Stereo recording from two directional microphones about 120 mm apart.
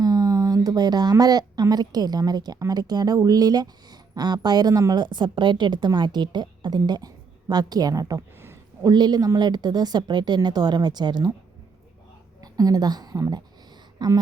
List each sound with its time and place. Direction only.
0.0 s speech: 30° right (ahead or behind)
12.4 s a woman's voice: 30° right (ahead or behind)